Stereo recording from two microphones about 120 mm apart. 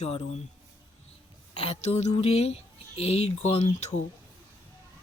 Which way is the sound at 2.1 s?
60° left (ahead or behind).